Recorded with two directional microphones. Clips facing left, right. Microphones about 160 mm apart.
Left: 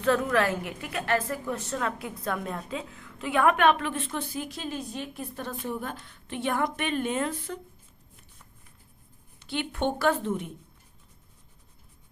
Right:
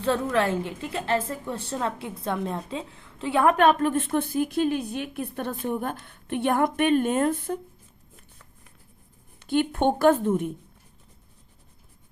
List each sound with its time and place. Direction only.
0.0 s a woman's voice: 30° right (ahead or behind); by 7.6 s 50° right (ahead or behind)
9.4 s a woman's voice: 50° right (ahead or behind)